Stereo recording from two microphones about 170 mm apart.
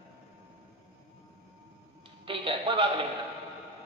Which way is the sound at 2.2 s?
30° right (ahead or behind).